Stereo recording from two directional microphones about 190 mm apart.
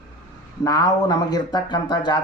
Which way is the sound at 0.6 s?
20° left (ahead or behind).